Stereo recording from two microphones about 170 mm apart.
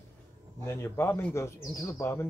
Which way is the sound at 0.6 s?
15° left (ahead or behind).